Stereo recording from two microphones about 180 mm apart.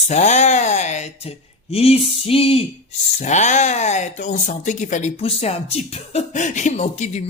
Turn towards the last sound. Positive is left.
turn(degrees=40)  # may be behind; listen again after turning